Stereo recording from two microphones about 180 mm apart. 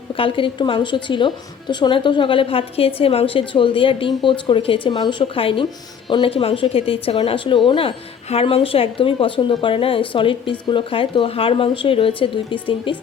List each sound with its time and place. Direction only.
0.2 s a woman's voice: 30° left (ahead or behind)